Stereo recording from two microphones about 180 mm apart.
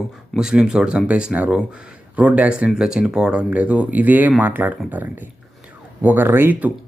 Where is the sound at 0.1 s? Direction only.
5° right (ahead or behind).